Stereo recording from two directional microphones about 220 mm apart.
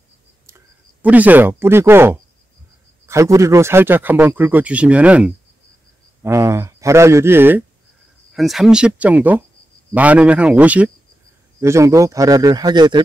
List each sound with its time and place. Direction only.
1.0 s speech: 5° right (ahead or behind)